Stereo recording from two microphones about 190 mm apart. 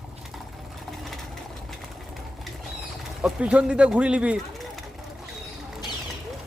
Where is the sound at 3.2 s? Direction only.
5° right (ahead or behind).